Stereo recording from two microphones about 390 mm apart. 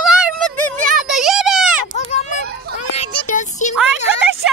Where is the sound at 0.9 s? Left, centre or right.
Centre.